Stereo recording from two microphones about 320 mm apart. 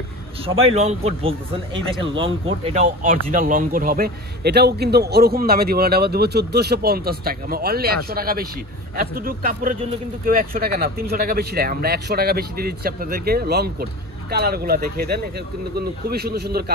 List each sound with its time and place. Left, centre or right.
0.5 s a man's voice: centre